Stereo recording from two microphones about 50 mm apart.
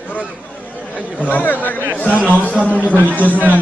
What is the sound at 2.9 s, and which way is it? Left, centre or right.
Speech, right.